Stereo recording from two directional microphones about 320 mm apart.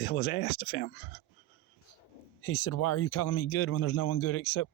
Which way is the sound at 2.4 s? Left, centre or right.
Left.